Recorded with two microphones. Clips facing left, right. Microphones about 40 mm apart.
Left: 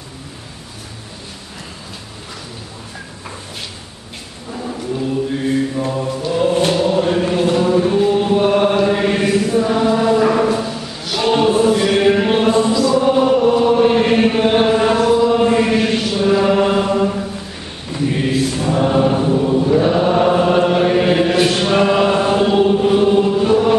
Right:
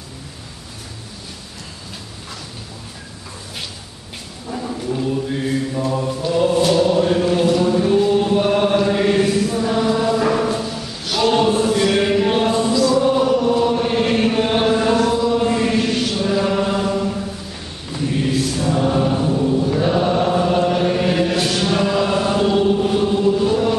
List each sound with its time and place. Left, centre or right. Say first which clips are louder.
4.5 s mantra: even; centre
6.7 s chant: even; centre
9.7 s choir: left 3 dB; centre
12.9 s chant: left 2 dB; left
13.6 s chant: left 5 dB; centre